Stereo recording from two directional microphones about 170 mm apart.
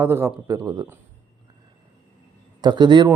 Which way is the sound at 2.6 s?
25° right (ahead or behind).